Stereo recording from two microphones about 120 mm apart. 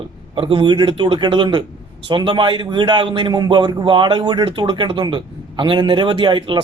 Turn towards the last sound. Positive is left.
turn(degrees=-40)  # may be behind; listen again after turning